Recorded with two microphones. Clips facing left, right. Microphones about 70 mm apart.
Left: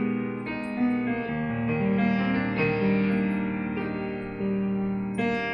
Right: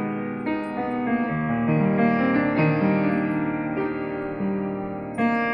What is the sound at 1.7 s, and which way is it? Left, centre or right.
Music, right.